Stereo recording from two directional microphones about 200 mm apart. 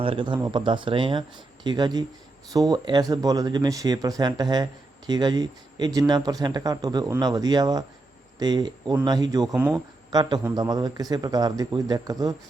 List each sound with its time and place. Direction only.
0.0 s speech: 25° right (ahead or behind)